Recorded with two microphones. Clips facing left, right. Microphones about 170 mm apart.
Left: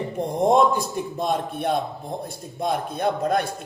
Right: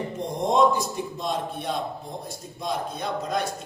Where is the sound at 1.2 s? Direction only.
55° left (ahead or behind).